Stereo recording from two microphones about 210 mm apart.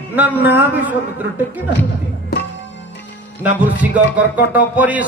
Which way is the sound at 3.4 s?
5° right (ahead or behind).